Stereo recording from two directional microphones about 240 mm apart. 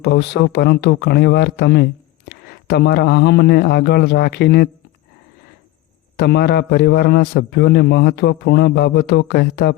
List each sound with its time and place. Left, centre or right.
0.0 s a man's voice: left
6.1 s a man's voice: left